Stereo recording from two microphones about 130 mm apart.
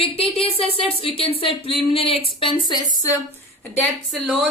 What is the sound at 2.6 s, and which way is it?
Speech, 30° left (ahead or behind).